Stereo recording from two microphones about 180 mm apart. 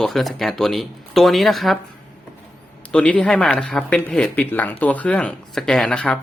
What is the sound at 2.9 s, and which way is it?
Speech, 5° left (ahead or behind).